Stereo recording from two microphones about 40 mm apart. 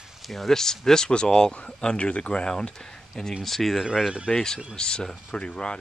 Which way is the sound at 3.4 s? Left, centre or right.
Centre.